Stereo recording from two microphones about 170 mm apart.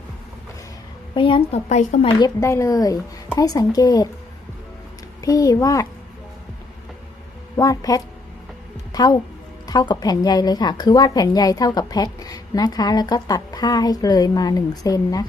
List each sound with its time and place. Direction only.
1.1 s a woman's voice: 30° left (ahead or behind)
2.1 s a woman's voice: 20° left (ahead or behind)
5.2 s a woman's voice: 20° left (ahead or behind)
7.5 s a woman's voice: 20° left (ahead or behind)
8.9 s music: 25° left (ahead or behind)
9.6 s a woman's voice: 25° left (ahead or behind)